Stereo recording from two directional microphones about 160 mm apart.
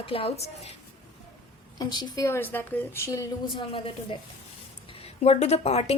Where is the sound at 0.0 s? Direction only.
35° left (ahead or behind).